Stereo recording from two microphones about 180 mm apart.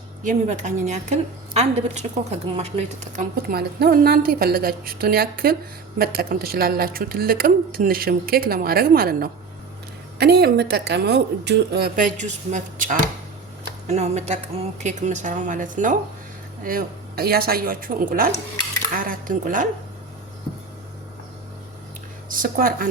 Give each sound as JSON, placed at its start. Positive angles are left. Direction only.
{"t": 0.2, "sound": "a woman's voice", "side_deg": -45}
{"t": 3.5, "sound": "speech", "side_deg": -60}
{"t": 12.2, "sound": "a woman's voice", "side_deg": -40}
{"t": 22.3, "sound": "speech", "side_deg": -50}